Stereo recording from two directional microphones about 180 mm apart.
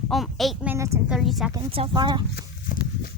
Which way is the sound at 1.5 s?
30° right (ahead or behind).